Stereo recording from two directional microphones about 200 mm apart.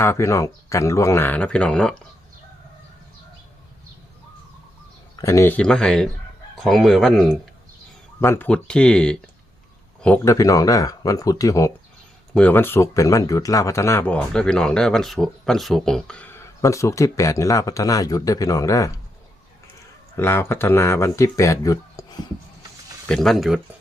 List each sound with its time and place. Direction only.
0.0 s speech: 15° left (ahead or behind)
5.1 s speech: 15° left (ahead or behind)
10.3 s speech: 15° left (ahead or behind)
20.1 s speech: 10° left (ahead or behind)
23.0 s speech: centre (ahead or behind)